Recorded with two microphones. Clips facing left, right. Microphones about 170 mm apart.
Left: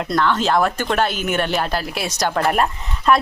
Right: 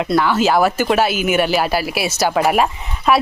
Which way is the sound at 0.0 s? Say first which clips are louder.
Right 3 dB; 5° right (ahead or behind).